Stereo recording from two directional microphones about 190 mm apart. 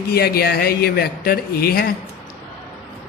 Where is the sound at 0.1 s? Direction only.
55° left (ahead or behind).